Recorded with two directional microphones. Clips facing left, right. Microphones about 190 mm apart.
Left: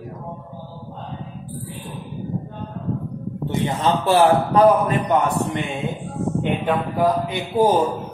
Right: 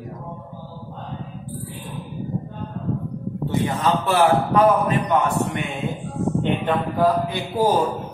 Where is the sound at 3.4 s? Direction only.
25° left (ahead or behind).